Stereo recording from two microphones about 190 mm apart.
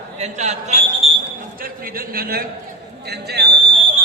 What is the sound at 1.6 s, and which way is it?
A man's voice, 50° right (ahead or behind).